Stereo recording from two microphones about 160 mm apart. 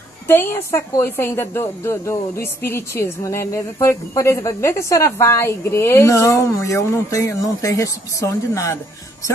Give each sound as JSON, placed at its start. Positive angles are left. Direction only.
{"t": 0.3, "sound": "a woman's voice", "side_deg": 15}